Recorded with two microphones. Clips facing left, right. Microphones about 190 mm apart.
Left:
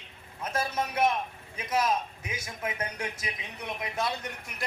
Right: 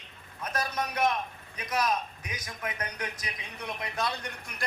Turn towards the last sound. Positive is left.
turn(degrees=25)  # may be behind; listen again after turning